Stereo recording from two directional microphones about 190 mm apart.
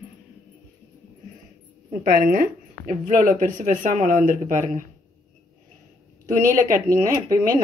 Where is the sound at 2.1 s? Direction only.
45° right (ahead or behind).